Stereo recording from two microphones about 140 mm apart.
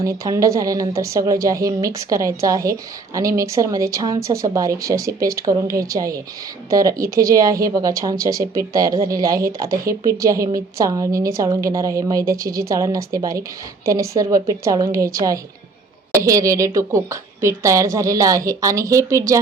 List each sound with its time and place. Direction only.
0.0 s a woman's voice: 25° right (ahead or behind)